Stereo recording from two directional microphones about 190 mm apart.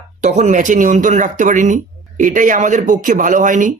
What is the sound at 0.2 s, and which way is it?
A man's voice, 40° right (ahead or behind).